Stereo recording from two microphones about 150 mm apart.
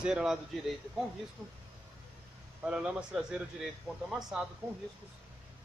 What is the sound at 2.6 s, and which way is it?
Speech, 5° right (ahead or behind).